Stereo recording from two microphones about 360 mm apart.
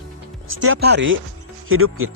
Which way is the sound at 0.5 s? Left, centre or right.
Right.